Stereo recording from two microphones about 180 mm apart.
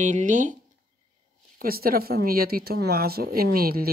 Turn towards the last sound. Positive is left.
turn(degrees=-55)  # may be behind; listen again after turning